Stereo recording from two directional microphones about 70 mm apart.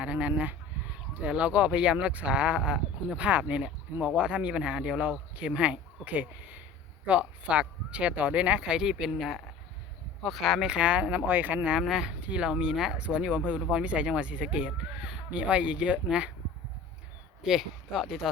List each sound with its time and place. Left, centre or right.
0.0 s speech: centre
10.7 s speech: centre
11.7 s speech: centre
17.4 s speech: centre